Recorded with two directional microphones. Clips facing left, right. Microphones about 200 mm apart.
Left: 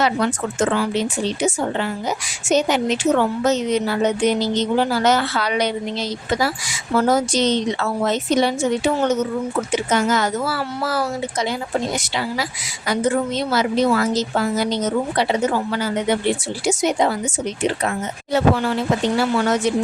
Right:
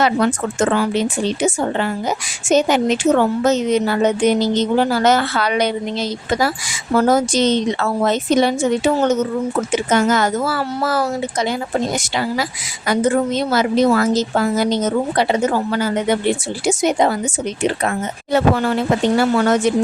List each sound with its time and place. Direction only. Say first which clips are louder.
0.0 s a woman's voice: right 3 dB; 50° right (ahead or behind)
9.7 s a woman's voice: right 3 dB; 50° right (ahead or behind)